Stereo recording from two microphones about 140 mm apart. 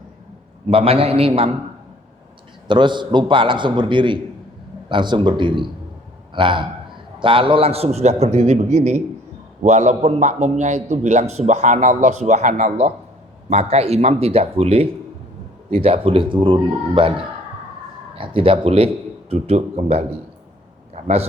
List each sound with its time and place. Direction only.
0.7 s a man's voice: 40° right (ahead or behind)
2.6 s a man's voice: 35° right (ahead or behind); by 20.1 s 50° right (ahead or behind)
20.9 s a sound: 50° right (ahead or behind)